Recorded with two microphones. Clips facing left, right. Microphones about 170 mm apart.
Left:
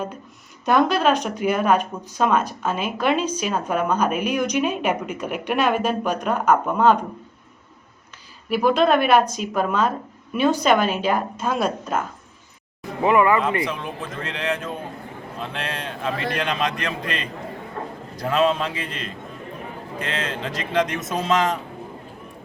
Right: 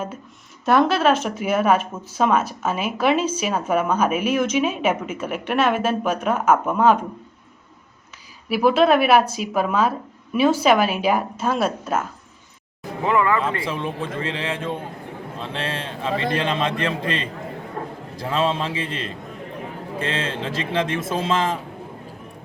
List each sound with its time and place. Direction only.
0.6 s speech: centre (ahead or behind)
8.4 s speech: 5° right (ahead or behind)
13.1 s speech: 15° left (ahead or behind)
13.7 s speech: centre (ahead or behind)
14.5 s a man's voice: 30° right (ahead or behind)